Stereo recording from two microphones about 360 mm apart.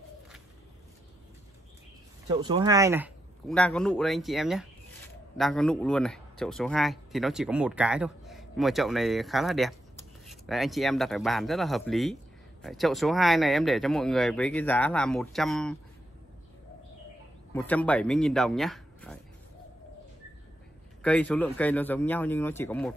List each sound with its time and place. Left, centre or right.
2.2 s speech: centre
17.5 s speech: centre
21.0 s speech: centre